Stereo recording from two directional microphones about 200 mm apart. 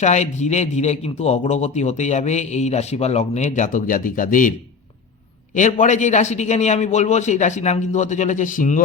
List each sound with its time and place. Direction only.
0.0 s a man's voice: 35° left (ahead or behind)
5.5 s a man's voice: 40° left (ahead or behind)